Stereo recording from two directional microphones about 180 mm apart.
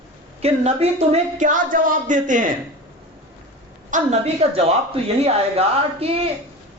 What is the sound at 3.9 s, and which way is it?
Speech, 35° right (ahead or behind).